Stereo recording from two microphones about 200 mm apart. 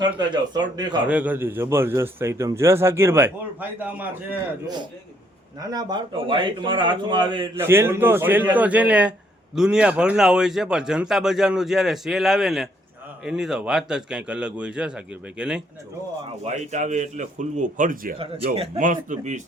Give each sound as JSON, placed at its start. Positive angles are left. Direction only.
{"t": 0.0, "sound": "speech", "side_deg": -20}
{"t": 1.0, "sound": "a man's voice", "side_deg": -5}
{"t": 4.6, "sound": "speech", "side_deg": -20}
{"t": 7.5, "sound": "a man's voice", "side_deg": -10}
{"t": 16.4, "sound": "a man's voice", "side_deg": -35}
{"t": 18.2, "sound": "speech", "side_deg": -30}
{"t": 18.8, "sound": "a man's voice", "side_deg": -40}